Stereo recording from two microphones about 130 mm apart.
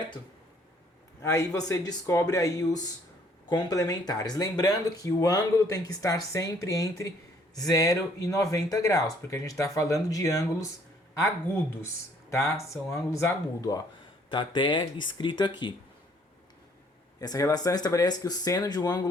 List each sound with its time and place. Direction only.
1.2 s speech: 25° left (ahead or behind)
12.3 s speech: 20° left (ahead or behind)
14.3 s speech: 40° left (ahead or behind)
17.2 s speech: 25° left (ahead or behind)